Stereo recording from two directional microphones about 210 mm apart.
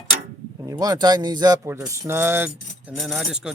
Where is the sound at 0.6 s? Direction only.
15° right (ahead or behind); by 3.5 s centre (ahead or behind).